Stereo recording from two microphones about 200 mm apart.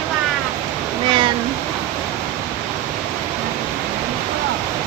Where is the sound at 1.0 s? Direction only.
25° right (ahead or behind).